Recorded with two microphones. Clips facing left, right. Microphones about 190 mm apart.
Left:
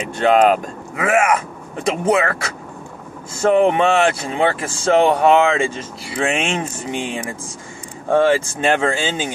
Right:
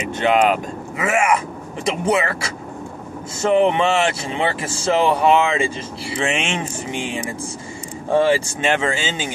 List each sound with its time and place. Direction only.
0.2 s speech: 45° left (ahead or behind)
3.4 s speech: 45° left (ahead or behind)
6.9 s speech: centre (ahead or behind)
8.1 s speech: 50° left (ahead or behind)